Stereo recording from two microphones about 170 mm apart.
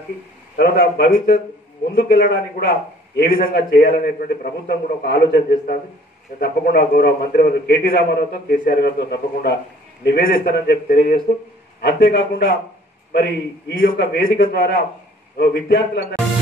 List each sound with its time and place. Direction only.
0.6 s a man's voice: 65° left (ahead or behind)